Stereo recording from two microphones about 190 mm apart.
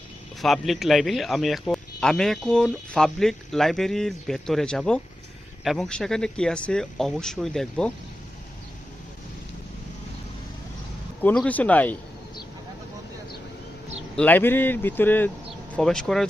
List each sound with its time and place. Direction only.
0.4 s a man's voice: centre (ahead or behind)
11.2 s speech: 10° left (ahead or behind)
14.2 s a man's voice: 10° left (ahead or behind)